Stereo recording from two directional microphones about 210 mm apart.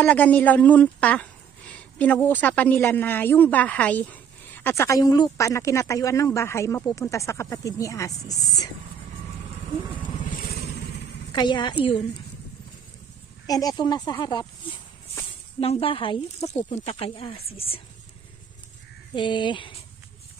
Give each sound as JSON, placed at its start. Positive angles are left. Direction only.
{"t": 0.0, "sound": "a woman's voice", "side_deg": 5}
{"t": 10.4, "sound": "vehicle", "side_deg": 45}
{"t": 11.3, "sound": "speech", "side_deg": 20}
{"t": 13.5, "sound": "speech", "side_deg": 20}
{"t": 19.1, "sound": "speech", "side_deg": 20}